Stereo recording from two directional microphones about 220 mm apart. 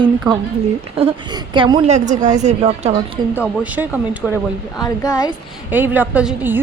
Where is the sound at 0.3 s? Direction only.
15° right (ahead or behind).